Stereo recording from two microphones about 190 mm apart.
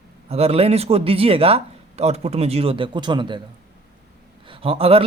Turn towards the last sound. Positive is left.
turn(degrees=-30)  # may be behind; listen again after turning